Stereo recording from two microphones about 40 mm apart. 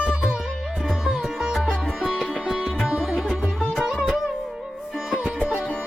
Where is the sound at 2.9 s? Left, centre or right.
Centre.